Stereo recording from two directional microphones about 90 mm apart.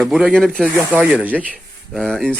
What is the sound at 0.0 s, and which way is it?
Speech, 5° right (ahead or behind).